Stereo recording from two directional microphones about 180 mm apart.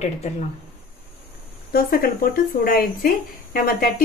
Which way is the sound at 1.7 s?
55° left (ahead or behind).